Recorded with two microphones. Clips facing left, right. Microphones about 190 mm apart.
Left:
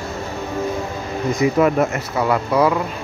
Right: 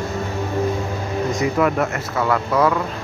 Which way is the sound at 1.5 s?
20° left (ahead or behind).